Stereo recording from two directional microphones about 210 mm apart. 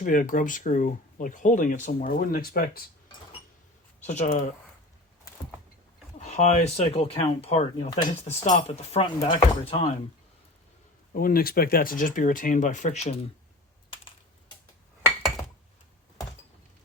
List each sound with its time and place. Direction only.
0.0 s speech: 40° left (ahead or behind)
4.0 s speech: 35° left (ahead or behind)
6.1 s speech: 30° left (ahead or behind)
11.1 s speech: 45° left (ahead or behind)